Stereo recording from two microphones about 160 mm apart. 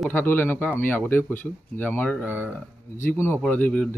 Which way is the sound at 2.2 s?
15° right (ahead or behind).